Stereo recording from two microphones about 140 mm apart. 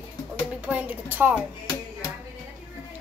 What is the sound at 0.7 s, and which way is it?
Speech, 10° right (ahead or behind).